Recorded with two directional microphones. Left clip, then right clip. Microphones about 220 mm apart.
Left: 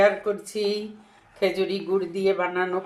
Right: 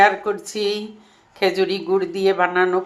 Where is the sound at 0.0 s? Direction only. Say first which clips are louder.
Right 5 dB; 20° right (ahead or behind).